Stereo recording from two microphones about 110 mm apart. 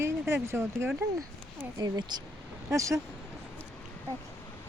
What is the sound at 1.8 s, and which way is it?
Speech, 40° right (ahead or behind).